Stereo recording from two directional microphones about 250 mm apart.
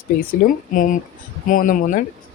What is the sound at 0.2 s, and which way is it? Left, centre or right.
Speech, left.